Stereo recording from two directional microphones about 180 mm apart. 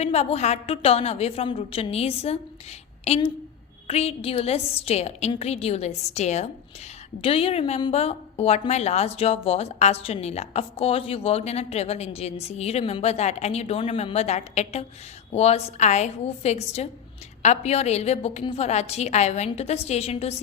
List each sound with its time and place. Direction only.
0.0 s a woman's voice: 35° left (ahead or behind)